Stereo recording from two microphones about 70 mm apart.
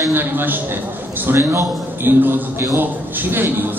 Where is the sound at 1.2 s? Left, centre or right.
Right.